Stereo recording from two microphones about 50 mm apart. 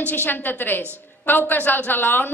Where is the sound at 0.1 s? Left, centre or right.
Left.